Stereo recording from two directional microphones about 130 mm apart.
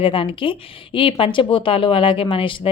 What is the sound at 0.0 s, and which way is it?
Speech, 40° left (ahead or behind).